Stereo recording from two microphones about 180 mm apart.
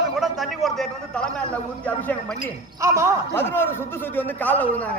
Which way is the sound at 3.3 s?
10° left (ahead or behind).